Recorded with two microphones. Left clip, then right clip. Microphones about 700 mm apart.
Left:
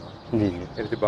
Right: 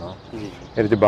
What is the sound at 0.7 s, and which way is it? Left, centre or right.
Speech, right.